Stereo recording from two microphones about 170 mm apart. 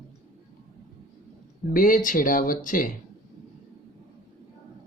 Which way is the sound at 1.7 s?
55° left (ahead or behind).